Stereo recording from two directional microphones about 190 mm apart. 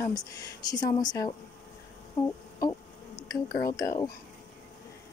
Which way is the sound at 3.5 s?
20° left (ahead or behind).